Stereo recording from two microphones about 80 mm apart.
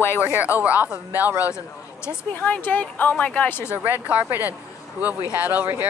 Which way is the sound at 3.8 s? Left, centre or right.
Right.